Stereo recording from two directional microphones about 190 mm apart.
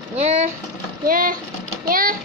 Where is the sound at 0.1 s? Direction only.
35° right (ahead or behind).